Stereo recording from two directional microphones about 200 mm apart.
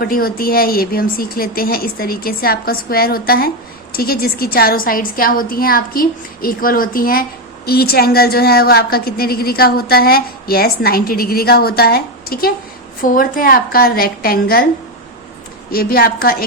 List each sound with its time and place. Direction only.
0.0 s a woman's voice: 50° left (ahead or behind)
15.7 s a woman's voice: 50° left (ahead or behind)